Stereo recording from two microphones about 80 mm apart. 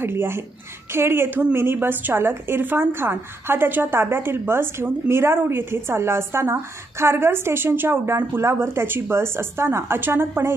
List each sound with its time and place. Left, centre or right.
0.0 s a woman's voice: right